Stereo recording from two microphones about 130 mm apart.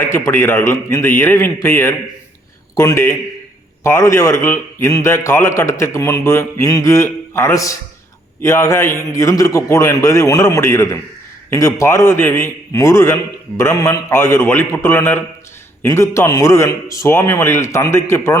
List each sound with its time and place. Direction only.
0.0 s a man's voice: 20° left (ahead or behind)